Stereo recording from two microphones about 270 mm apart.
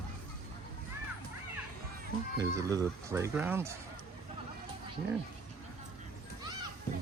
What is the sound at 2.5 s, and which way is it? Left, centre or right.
Speech, centre.